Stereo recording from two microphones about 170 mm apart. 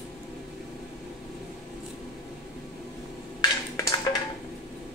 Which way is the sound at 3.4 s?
20° left (ahead or behind).